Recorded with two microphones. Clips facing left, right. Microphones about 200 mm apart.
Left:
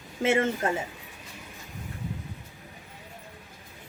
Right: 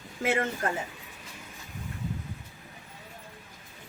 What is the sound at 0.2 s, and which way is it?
Speech, 25° left (ahead or behind).